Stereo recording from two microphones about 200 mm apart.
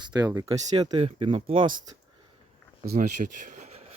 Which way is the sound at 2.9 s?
40° right (ahead or behind).